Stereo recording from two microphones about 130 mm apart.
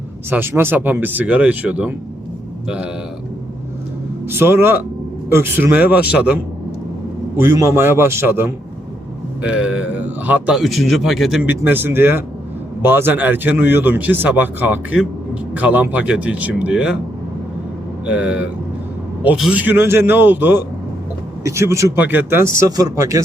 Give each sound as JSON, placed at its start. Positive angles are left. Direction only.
{"t": 0.3, "sound": "speech", "side_deg": -15}
{"t": 4.3, "sound": "speech", "side_deg": -20}
{"t": 7.4, "sound": "a man's voice", "side_deg": -20}
{"t": 11.4, "sound": "speech", "side_deg": -15}
{"t": 18.0, "sound": "speech", "side_deg": -10}